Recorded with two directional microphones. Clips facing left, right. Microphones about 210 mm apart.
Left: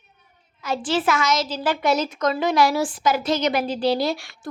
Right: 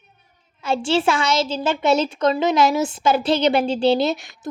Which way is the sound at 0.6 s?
25° right (ahead or behind).